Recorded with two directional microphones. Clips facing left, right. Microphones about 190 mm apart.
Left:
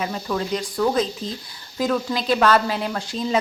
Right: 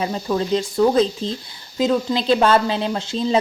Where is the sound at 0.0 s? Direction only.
30° right (ahead or behind).